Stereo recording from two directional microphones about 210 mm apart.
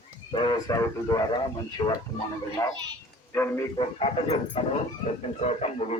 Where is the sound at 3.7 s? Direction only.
25° left (ahead or behind).